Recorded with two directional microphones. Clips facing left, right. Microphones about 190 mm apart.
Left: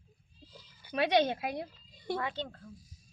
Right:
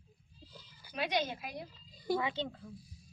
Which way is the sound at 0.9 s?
65° left (ahead or behind).